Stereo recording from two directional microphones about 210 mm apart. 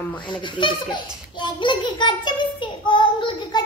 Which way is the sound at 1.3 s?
20° left (ahead or behind).